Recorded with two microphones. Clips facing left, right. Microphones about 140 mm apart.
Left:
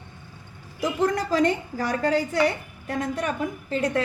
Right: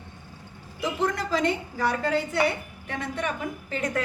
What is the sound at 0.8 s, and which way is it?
A woman's voice, 40° left (ahead or behind).